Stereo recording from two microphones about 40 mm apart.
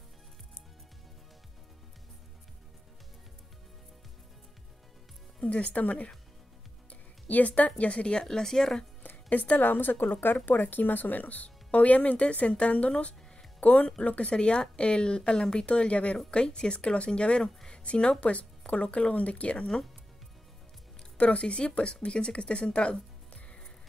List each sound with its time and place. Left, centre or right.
5.4 s speech: left
8.2 s speech: centre
9.0 s music: left
9.5 s a woman's voice: left
21.2 s speech: left